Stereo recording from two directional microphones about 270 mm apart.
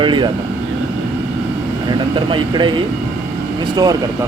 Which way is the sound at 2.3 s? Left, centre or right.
Centre.